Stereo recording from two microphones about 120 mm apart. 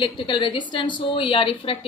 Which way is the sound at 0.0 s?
45° left (ahead or behind).